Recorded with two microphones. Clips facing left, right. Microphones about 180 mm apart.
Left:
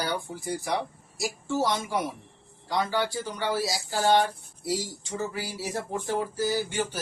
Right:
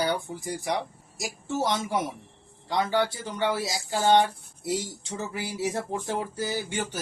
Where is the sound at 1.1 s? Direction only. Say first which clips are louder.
Left 2 dB; 20° right (ahead or behind).